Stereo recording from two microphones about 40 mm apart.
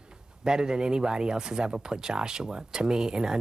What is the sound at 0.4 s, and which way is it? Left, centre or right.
Speech, centre.